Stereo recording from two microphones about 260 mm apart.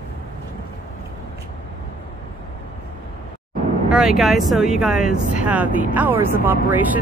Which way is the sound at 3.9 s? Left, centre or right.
Centre.